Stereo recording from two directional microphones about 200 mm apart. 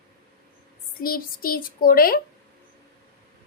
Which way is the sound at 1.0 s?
45° left (ahead or behind).